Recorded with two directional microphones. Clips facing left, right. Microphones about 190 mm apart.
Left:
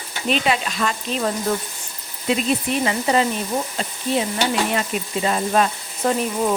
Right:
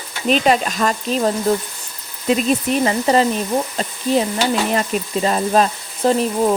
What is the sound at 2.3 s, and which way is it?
Sizzle, 45° right (ahead or behind).